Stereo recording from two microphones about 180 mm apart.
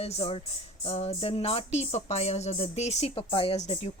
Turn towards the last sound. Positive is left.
turn(degrees=35)  # may be behind; listen again after turning